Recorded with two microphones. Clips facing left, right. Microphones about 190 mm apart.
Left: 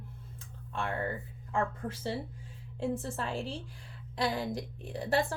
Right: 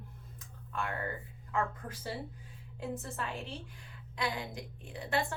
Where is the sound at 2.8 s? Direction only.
30° left (ahead or behind).